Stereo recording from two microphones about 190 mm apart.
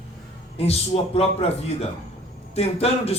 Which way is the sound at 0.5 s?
30° left (ahead or behind).